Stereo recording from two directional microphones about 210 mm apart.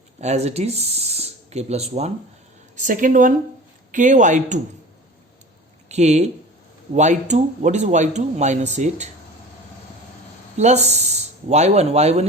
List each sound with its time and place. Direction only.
0.2 s speech: 30° right (ahead or behind)
5.9 s speech: 35° right (ahead or behind)
10.6 s speech: 30° right (ahead or behind)